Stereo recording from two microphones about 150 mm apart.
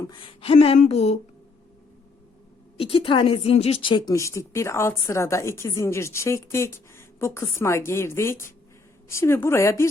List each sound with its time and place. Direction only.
0.0 s a woman's voice: 30° left (ahead or behind)
2.7 s a woman's voice: 40° left (ahead or behind); by 9.8 s 20° left (ahead or behind)